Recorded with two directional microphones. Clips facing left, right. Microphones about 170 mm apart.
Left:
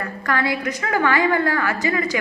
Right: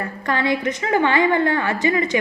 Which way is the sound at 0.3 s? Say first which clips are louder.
Right 2 dB; 20° right (ahead or behind).